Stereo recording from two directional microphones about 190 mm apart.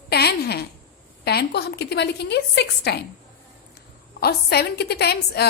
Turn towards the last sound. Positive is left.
turn(degrees=60)  # may be behind; listen again after turning